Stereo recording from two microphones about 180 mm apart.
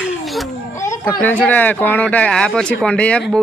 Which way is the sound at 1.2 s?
10° left (ahead or behind).